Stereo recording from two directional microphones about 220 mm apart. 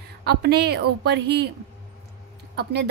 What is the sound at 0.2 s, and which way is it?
A woman's voice, 50° right (ahead or behind).